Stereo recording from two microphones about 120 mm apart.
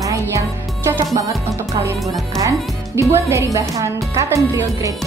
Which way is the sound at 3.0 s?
20° right (ahead or behind).